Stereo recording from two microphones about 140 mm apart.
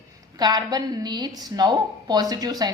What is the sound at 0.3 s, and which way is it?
A woman's voice, 30° right (ahead or behind).